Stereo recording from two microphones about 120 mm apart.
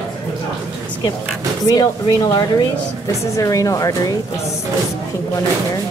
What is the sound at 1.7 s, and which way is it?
Speech, 30° left (ahead or behind).